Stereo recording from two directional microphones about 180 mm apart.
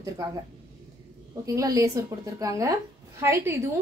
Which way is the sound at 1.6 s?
20° right (ahead or behind).